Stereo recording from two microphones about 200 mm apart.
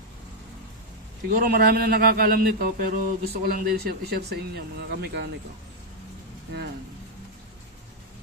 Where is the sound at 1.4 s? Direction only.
50° right (ahead or behind).